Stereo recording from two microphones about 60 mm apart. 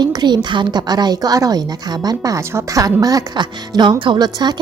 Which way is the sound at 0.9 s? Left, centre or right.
Right.